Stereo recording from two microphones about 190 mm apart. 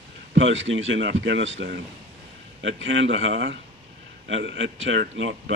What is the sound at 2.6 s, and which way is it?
Speech, 80° right.